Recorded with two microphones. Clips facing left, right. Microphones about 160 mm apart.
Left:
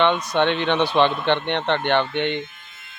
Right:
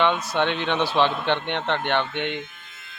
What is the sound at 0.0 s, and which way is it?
Speech, 5° right (ahead or behind).